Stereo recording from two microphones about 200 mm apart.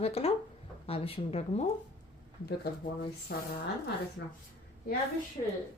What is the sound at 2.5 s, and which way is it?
Speech, 50° left (ahead or behind).